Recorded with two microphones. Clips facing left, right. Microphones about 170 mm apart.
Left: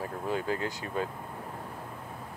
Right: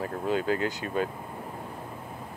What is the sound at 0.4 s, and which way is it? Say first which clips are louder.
Speech: right 5 dB; 80° right.